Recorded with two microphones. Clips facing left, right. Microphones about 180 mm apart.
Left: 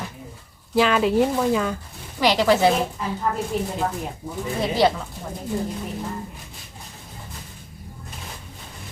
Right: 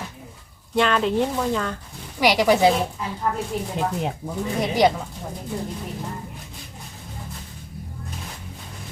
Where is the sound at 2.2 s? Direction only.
15° right (ahead or behind).